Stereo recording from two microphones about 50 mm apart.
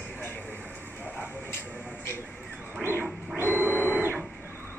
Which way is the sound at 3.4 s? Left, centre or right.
Right.